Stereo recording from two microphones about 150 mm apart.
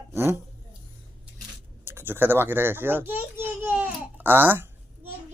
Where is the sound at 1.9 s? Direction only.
15° right (ahead or behind).